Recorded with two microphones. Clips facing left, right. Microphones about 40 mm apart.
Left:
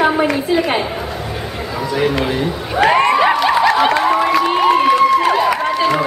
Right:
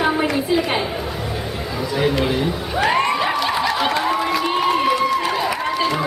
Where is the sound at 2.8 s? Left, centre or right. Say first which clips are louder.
Left 7 dB; left.